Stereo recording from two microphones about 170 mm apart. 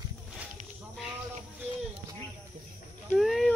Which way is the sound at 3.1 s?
Centre (ahead or behind).